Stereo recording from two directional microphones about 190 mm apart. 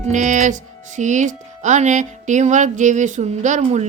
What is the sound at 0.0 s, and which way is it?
A woman's voice, 40° right (ahead or behind).